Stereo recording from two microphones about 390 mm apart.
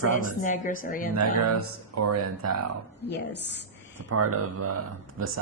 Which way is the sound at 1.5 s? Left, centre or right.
Right.